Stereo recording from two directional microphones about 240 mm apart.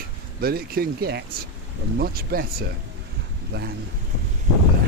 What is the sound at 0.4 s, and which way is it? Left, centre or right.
Speech, right.